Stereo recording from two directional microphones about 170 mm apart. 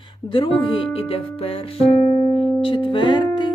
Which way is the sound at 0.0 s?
30° left (ahead or behind).